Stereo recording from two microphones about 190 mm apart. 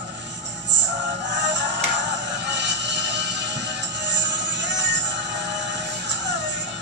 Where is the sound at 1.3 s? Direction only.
65° right (ahead or behind).